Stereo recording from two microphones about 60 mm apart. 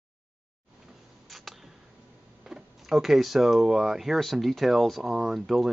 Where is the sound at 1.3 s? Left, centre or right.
Centre.